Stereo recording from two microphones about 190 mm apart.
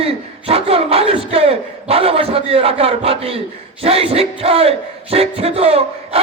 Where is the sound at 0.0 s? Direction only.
30° right (ahead or behind).